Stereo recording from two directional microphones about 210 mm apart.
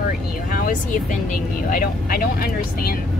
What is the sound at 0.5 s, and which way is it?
Vehicle, 40° left (ahead or behind).